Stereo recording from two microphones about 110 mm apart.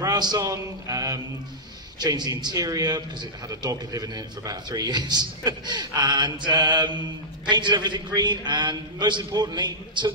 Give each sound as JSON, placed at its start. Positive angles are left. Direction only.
{"t": 0.0, "sound": "a man's voice", "side_deg": -40}